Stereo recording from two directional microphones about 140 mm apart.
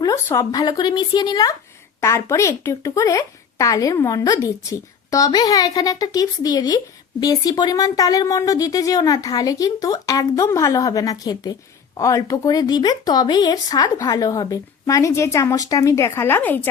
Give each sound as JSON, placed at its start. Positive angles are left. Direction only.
{"t": 0.0, "sound": "a woman's voice", "side_deg": 25}